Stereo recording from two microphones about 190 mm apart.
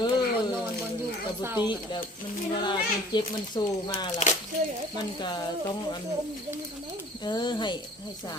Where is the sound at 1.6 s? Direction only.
25° left (ahead or behind).